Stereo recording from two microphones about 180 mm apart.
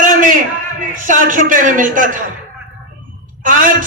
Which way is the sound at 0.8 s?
45° right (ahead or behind).